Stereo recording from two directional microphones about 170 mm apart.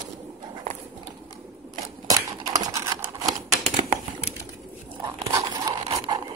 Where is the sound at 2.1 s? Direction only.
20° right (ahead or behind).